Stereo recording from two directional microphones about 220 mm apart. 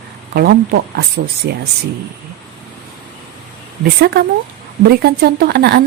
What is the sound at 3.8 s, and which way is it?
Speech, 45° right (ahead or behind).